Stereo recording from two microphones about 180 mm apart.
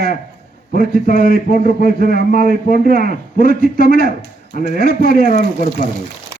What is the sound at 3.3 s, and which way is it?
A man's voice, 50° left (ahead or behind).